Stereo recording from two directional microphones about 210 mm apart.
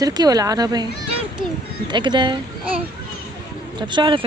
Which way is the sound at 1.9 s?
20° right (ahead or behind).